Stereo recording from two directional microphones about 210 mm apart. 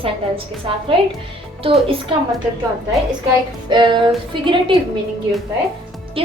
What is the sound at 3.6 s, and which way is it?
A woman's voice, 20° right (ahead or behind).